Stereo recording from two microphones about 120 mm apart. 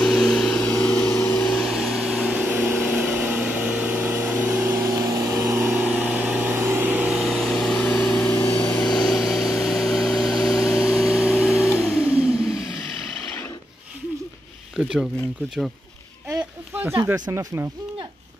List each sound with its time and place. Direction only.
0.0 s vehicle: 5° left (ahead or behind)
0.9 s vehicle: 20° left (ahead or behind); by 5.7 s 25° right (ahead or behind)
5.7 s vehicle: 15° right (ahead or behind)
7.2 s vehicle: centre (ahead or behind)
14.8 s a sound: 5° right (ahead or behind)
16.7 s speech: 20° right (ahead or behind)